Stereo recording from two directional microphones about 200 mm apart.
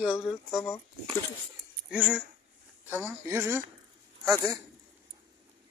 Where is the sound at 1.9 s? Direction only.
5° right (ahead or behind).